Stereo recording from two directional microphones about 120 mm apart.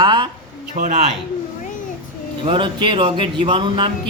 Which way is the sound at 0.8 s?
70° right (ahead or behind).